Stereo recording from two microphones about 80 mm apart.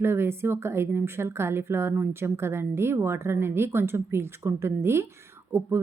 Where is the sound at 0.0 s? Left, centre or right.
Right.